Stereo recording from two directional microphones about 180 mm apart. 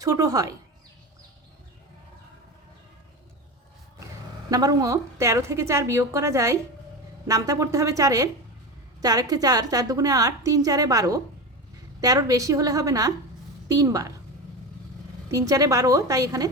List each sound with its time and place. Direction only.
0.0 s a woman's voice: 15° right (ahead or behind)
4.5 s a woman's voice: 20° right (ahead or behind)
15.3 s a woman's voice: 20° right (ahead or behind)